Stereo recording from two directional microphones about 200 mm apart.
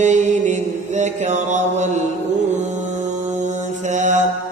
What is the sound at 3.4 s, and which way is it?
Mantra, 35° right (ahead or behind).